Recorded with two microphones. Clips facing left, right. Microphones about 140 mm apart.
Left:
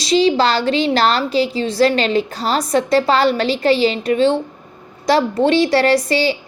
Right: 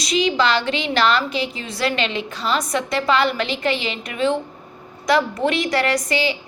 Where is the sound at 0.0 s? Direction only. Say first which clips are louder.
Left 5 dB; 30° left (ahead or behind).